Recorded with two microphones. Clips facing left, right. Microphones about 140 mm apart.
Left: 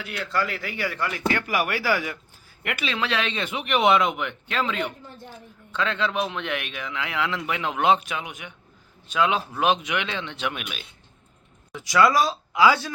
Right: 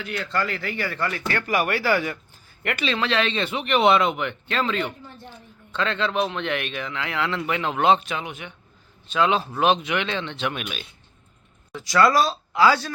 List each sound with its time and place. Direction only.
0.0 s speech: 5° left (ahead or behind)